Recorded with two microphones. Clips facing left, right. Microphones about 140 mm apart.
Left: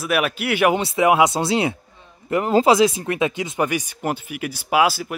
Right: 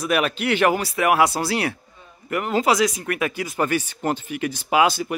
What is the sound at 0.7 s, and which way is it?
Speech, 20° left (ahead or behind).